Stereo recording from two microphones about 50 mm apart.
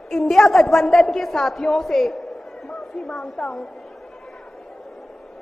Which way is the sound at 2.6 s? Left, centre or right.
Centre.